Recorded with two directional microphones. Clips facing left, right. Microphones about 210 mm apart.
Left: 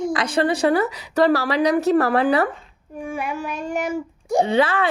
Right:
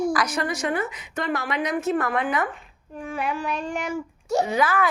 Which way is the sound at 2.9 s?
10° left (ahead or behind).